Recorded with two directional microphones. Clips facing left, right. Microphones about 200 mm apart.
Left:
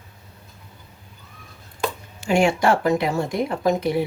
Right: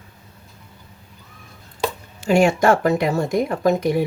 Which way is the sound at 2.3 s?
45° right (ahead or behind).